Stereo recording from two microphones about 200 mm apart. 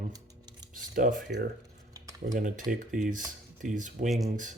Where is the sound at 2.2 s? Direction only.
40° right (ahead or behind).